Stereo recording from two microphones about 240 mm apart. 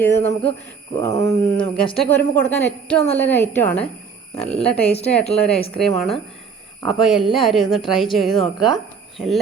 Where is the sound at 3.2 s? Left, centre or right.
Centre.